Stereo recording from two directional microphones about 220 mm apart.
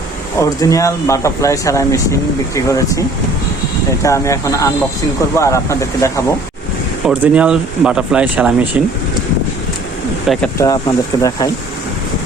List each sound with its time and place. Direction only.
0.3 s speech: 15° left (ahead or behind)
4.0 s speech: 15° left (ahead or behind)
7.0 s speech: 5° right (ahead or behind)
10.3 s speech: centre (ahead or behind)
10.6 s speech: 15° left (ahead or behind)